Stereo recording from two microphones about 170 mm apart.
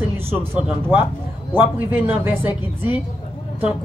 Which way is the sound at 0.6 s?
10° right (ahead or behind).